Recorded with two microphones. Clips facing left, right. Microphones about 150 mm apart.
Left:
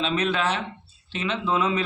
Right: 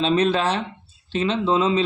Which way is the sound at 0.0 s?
35° right (ahead or behind).